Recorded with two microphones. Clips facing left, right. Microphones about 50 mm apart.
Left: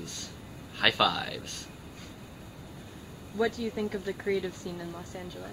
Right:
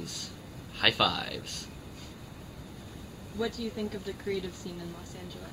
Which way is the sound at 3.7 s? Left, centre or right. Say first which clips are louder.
Left 3 dB; left.